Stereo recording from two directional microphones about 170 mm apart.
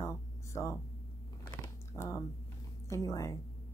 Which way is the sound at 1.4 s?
20° left (ahead or behind).